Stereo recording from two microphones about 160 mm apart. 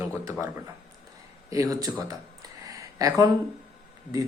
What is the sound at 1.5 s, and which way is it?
Speech, 20° right (ahead or behind).